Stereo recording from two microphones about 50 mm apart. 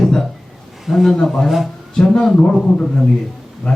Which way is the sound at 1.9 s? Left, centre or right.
Centre.